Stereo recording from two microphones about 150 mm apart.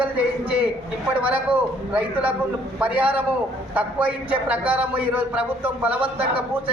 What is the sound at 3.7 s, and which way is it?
A man's voice, 10° right (ahead or behind).